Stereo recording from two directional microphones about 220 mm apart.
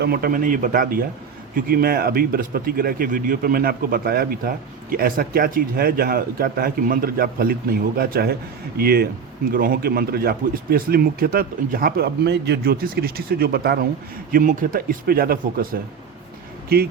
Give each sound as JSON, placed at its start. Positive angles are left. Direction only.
{"t": 0.0, "sound": "speech", "side_deg": -45}
{"t": 16.6, "sound": "speech", "side_deg": -45}